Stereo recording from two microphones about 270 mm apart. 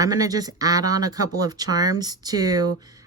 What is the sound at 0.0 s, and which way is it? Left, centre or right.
Speech, centre.